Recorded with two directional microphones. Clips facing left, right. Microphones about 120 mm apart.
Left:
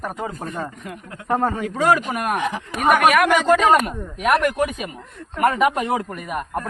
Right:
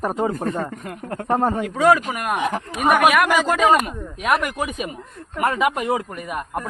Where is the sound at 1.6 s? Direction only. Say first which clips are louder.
Right 3 dB; centre (ahead or behind).